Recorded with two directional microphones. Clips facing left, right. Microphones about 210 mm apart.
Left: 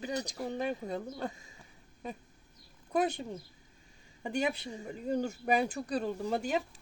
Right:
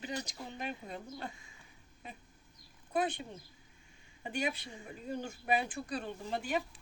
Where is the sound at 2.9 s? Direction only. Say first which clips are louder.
Left 4 dB; 40° left (ahead or behind).